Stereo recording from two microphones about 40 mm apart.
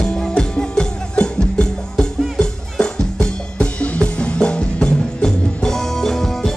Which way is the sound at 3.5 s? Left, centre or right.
Left.